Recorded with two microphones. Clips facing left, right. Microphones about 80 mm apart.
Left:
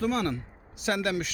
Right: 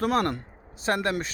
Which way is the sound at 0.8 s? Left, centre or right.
Right.